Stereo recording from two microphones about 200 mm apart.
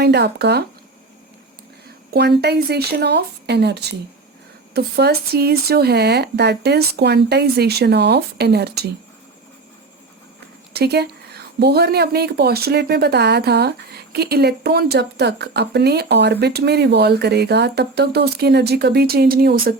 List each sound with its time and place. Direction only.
0.0 s speech: 55° right (ahead or behind)
2.1 s speech: 55° right (ahead or behind)
10.8 s speech: 55° right (ahead or behind)